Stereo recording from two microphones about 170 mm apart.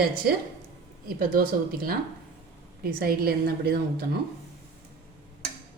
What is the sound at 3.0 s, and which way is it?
A woman's voice, 65° right (ahead or behind).